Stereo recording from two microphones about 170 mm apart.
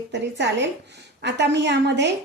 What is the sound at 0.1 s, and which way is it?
A woman's voice, 90° right.